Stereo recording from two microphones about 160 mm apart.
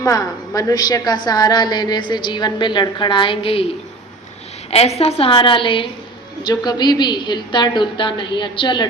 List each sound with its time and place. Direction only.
0.0 s a woman's voice: 20° left (ahead or behind)
4.7 s a woman's voice: 40° left (ahead or behind)